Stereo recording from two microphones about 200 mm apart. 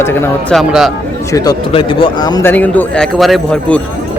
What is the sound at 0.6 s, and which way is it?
Speech, centre (ahead or behind).